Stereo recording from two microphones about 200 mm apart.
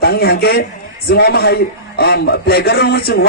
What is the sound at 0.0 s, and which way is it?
A man's voice, 50° left (ahead or behind).